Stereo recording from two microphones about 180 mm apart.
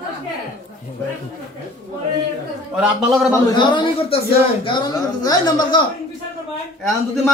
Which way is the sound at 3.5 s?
25° left (ahead or behind).